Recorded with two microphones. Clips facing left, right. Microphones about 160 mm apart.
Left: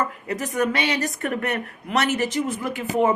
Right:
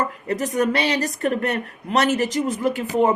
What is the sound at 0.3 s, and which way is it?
Speech, 35° right (ahead or behind).